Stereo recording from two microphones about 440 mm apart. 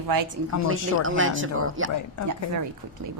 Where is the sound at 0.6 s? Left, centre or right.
Right.